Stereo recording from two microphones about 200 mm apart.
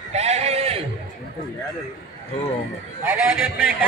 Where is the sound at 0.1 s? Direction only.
35° right (ahead or behind).